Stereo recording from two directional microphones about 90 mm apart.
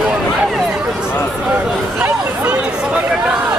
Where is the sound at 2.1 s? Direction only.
25° right (ahead or behind).